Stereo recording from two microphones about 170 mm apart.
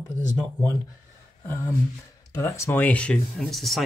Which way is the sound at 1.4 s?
15° left (ahead or behind).